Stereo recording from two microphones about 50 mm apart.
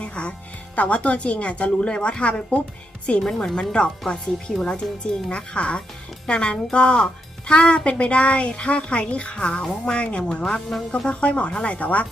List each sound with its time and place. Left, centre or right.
0.0 s music: left
0.8 s speech: left
3.2 s speech: centre; by 12.0 s left